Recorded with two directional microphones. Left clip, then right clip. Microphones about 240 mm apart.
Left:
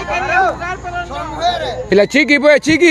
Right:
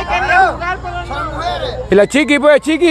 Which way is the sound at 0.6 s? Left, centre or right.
Centre.